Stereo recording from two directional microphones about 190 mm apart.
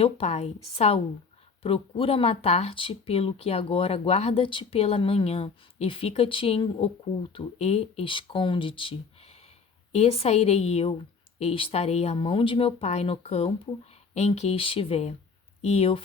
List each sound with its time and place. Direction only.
0.0 s a woman's voice: 35° left (ahead or behind)